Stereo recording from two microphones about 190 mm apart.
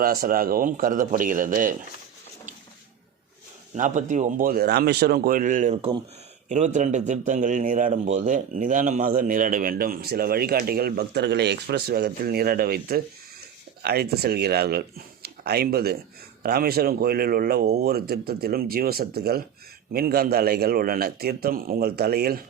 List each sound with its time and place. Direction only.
0.0 s a man's voice: 50° right (ahead or behind)
3.8 s a man's voice: 40° right (ahead or behind)
5.7 s speech: 30° right (ahead or behind)
6.5 s a man's voice: 40° right (ahead or behind)